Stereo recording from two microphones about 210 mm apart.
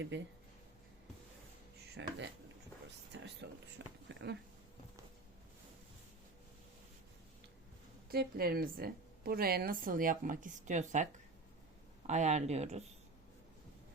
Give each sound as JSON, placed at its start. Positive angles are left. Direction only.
{"t": 0.1, "sound": "speech", "side_deg": -60}
{"t": 2.0, "sound": "speech", "side_deg": -60}
{"t": 3.1, "sound": "a sound", "side_deg": -55}
{"t": 8.1, "sound": "a woman's voice", "side_deg": -45}